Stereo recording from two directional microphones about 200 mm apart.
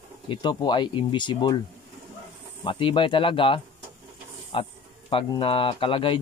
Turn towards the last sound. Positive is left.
turn(degrees=25)  # may be behind; listen again after turning